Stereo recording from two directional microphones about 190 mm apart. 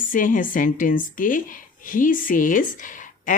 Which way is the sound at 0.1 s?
45° left (ahead or behind).